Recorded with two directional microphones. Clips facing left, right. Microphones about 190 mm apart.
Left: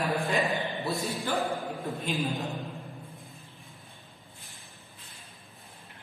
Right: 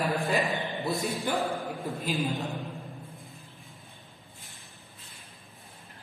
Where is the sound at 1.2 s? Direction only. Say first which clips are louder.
Even; 15° right (ahead or behind).